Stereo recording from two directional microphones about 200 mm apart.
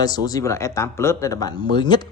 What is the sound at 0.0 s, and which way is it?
A man's voice, 20° left (ahead or behind).